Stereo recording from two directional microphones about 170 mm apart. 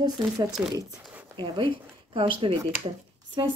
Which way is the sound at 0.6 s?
15° right (ahead or behind).